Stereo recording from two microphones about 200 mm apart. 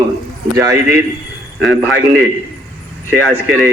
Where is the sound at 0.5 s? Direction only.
15° right (ahead or behind).